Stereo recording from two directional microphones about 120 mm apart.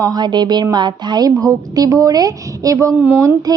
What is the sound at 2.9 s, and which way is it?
Speech, 15° right (ahead or behind).